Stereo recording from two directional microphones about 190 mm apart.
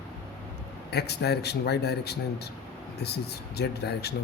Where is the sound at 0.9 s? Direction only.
60° left (ahead or behind).